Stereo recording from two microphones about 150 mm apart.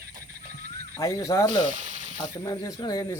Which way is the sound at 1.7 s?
55° right (ahead or behind).